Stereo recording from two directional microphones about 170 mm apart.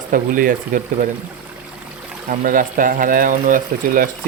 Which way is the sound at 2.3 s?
55° right (ahead or behind).